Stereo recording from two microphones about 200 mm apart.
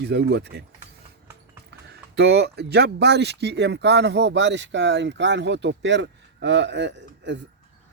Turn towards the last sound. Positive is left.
turn(degrees=-60)  # may be behind; listen again after turning